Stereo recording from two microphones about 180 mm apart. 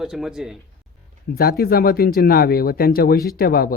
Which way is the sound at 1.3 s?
55° left (ahead or behind).